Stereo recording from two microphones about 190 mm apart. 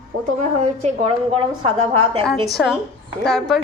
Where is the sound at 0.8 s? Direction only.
30° right (ahead or behind).